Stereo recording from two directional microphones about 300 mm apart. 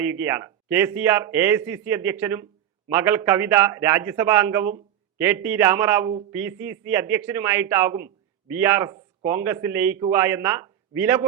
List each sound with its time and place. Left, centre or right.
0.0 s a man's voice: centre